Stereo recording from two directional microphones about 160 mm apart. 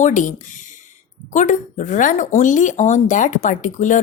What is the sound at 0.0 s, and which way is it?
Speech, 50° left (ahead or behind).